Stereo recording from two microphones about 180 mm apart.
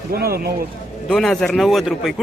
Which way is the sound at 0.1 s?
55° right (ahead or behind).